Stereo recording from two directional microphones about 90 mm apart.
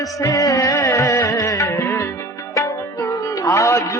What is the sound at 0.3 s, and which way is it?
Music, 40° left (ahead or behind).